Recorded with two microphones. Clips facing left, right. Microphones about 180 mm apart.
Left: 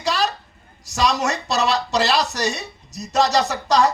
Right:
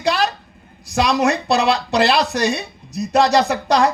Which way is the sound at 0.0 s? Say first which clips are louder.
Right 3 dB; 60° right (ahead or behind).